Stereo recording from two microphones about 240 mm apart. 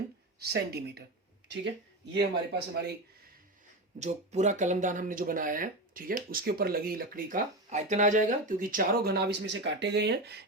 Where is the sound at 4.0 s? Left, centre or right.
Right.